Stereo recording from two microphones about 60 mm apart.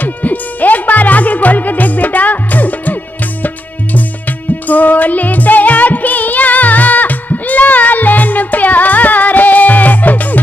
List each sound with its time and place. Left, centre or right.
0.0 s music: left